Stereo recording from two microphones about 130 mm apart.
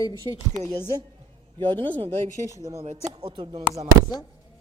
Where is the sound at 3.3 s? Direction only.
40° right (ahead or behind).